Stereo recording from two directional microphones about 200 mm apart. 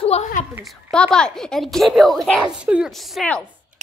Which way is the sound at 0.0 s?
30° left (ahead or behind).